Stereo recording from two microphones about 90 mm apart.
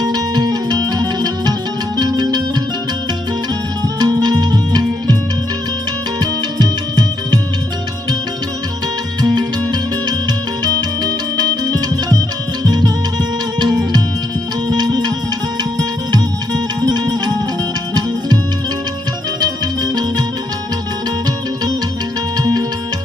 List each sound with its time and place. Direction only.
0.0 s music: 50° right (ahead or behind)
4.0 s music: 50° right (ahead or behind)
6.1 s music: 50° right (ahead or behind)
10.6 s music: 50° right (ahead or behind)
14.7 s music: 50° right (ahead or behind)
19.4 s music: 50° right (ahead or behind)